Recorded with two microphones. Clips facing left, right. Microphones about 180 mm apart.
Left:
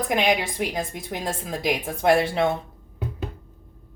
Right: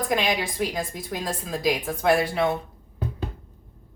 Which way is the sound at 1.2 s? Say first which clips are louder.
Right 1 dB; 20° left (ahead or behind).